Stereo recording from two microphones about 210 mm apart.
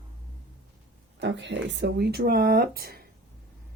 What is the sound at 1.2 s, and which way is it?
Speech, 60° right (ahead or behind).